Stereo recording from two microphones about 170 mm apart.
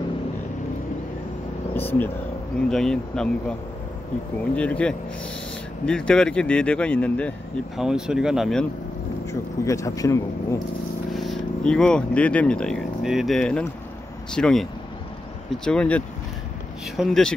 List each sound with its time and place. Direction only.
1.7 s speech: 10° left (ahead or behind)
4.6 s speech: 5° left (ahead or behind)
9.3 s speech: 20° left (ahead or behind)
11.1 s speech: centre (ahead or behind)